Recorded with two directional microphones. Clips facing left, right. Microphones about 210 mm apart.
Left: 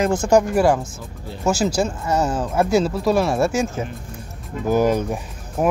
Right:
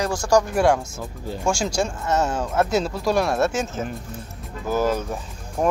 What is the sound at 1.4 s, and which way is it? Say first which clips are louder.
Speech: left 4 dB; 5° left (ahead or behind).